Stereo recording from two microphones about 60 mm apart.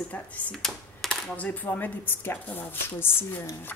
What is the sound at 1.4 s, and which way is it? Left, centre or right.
A woman's voice, left.